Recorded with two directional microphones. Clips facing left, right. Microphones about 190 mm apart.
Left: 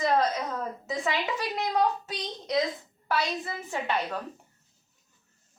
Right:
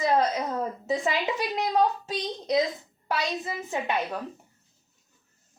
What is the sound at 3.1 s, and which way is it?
A woman's voice, 15° right (ahead or behind).